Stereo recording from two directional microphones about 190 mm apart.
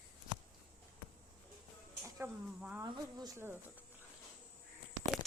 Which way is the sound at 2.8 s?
20° right (ahead or behind).